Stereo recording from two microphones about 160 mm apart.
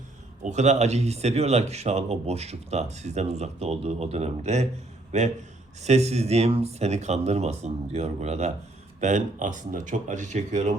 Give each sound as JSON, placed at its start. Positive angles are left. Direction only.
{"t": 0.4, "sound": "speech", "side_deg": -45}